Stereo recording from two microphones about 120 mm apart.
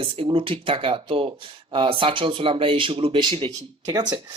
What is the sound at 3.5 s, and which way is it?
Speech, 30° right (ahead or behind).